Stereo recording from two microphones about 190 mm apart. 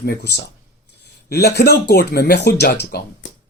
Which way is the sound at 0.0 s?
55° left (ahead or behind).